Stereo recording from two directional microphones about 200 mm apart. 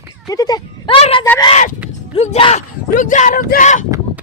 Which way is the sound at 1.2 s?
15° left (ahead or behind).